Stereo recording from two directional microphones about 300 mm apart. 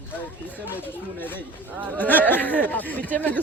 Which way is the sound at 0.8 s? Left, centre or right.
Centre.